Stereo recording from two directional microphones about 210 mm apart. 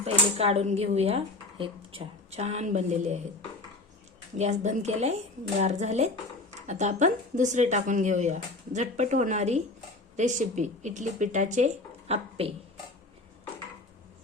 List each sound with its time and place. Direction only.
0.0 s speech: 30° right (ahead or behind)
4.4 s speech: 35° right (ahead or behind)